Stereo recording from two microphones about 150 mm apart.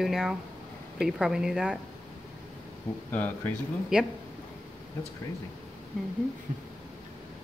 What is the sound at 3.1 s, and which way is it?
Speech, 10° left (ahead or behind).